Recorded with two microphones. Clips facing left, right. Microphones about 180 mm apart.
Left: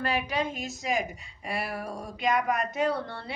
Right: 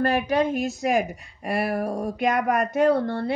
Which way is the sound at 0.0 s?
50° right (ahead or behind).